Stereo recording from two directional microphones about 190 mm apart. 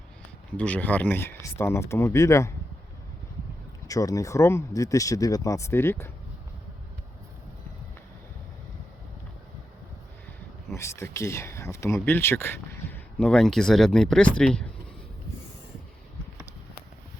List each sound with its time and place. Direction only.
0.5 s speech: 5° left (ahead or behind)
3.8 s speech: 20° left (ahead or behind)
10.8 s speech: 15° left (ahead or behind)